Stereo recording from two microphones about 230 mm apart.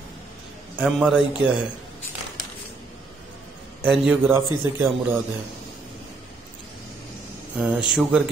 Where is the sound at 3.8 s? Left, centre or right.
Centre.